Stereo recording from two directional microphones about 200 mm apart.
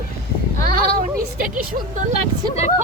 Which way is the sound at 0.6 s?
45° right (ahead or behind).